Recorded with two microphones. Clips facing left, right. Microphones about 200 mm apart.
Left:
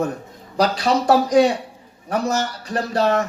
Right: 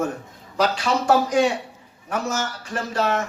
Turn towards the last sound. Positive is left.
turn(degrees=35)  # may be behind; listen again after turning